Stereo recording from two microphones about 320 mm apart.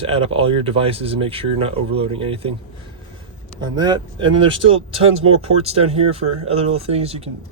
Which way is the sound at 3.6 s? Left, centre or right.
Centre.